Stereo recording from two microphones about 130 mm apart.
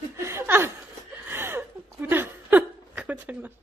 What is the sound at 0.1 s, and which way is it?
Chuckle, 20° right (ahead or behind).